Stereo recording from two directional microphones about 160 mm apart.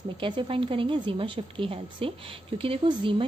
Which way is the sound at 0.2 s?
30° right (ahead or behind).